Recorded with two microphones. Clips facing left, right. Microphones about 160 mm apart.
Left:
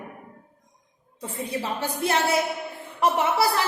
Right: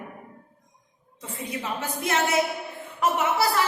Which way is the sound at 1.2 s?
30° left (ahead or behind).